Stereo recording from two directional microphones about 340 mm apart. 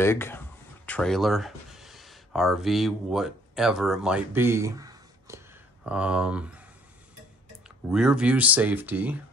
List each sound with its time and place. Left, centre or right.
0.0 s speech: centre
7.6 s speech: centre